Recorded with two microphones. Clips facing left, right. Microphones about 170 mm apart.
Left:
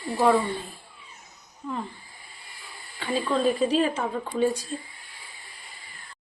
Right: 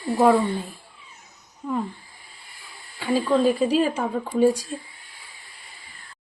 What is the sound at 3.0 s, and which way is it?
Speech, 5° right (ahead or behind).